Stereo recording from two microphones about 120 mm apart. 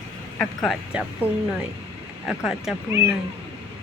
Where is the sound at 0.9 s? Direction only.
10° right (ahead or behind).